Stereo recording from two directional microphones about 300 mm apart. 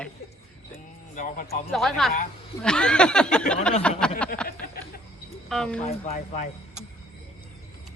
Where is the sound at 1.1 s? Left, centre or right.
Left.